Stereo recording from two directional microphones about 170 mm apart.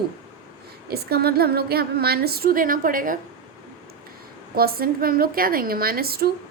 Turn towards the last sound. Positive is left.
turn(degrees=-65)  # may be behind; listen again after turning